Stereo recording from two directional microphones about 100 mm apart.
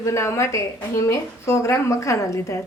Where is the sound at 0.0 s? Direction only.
30° left (ahead or behind).